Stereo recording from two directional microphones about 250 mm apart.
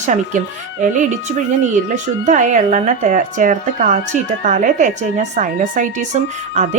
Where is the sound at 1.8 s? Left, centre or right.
Right.